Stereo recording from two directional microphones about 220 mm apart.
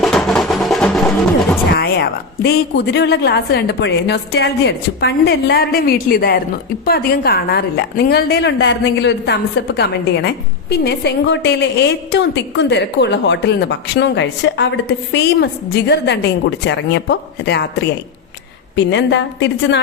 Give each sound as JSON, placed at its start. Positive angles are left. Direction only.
{"t": 0.0, "sound": "music", "side_deg": 0}
{"t": 1.7, "sound": "a woman's voice", "side_deg": 45}